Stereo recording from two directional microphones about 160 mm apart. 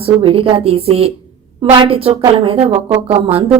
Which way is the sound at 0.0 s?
35° right (ahead or behind).